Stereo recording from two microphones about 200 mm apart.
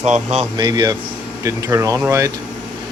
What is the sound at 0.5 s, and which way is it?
Speech, 20° right (ahead or behind).